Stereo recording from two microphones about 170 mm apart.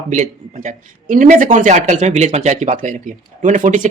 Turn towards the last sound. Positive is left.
turn(degrees=-50)  # may be behind; listen again after turning